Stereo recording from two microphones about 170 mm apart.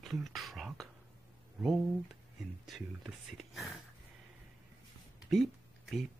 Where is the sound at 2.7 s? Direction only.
Centre (ahead or behind).